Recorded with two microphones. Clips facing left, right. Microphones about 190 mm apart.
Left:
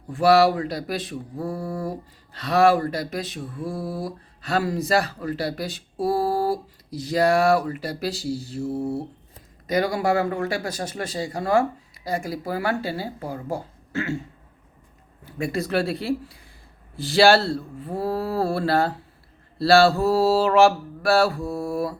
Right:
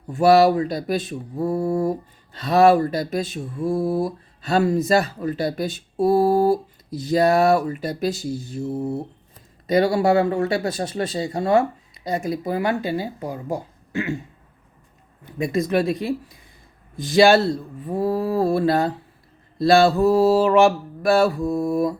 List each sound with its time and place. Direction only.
0.1 s speech: 25° right (ahead or behind)
15.2 s speech: 20° right (ahead or behind)